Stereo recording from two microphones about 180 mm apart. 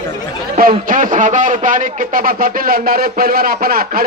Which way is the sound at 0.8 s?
50° right (ahead or behind).